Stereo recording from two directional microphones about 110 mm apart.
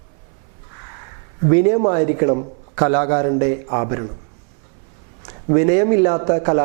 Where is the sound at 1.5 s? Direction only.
15° right (ahead or behind).